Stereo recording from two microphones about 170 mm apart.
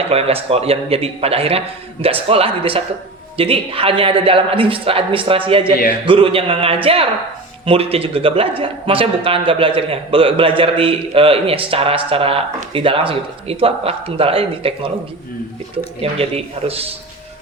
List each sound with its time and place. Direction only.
0.1 s a man's voice: 35° right (ahead or behind)
16.0 s a man's voice: 35° right (ahead or behind)